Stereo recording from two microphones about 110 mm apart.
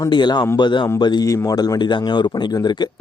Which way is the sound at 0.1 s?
40° left (ahead or behind).